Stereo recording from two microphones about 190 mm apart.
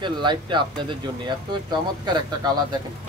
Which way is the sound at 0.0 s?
25° right (ahead or behind).